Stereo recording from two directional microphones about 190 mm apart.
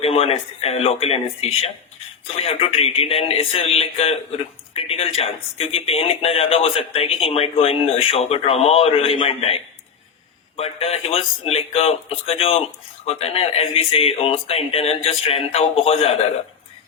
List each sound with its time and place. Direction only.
0.0 s speech: 30° left (ahead or behind)
10.6 s speech: 30° left (ahead or behind)